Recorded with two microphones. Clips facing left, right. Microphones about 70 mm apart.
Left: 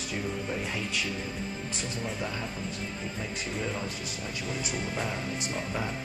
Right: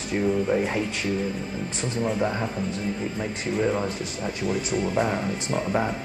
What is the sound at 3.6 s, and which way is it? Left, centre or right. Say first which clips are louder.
Speech: right 9 dB; right.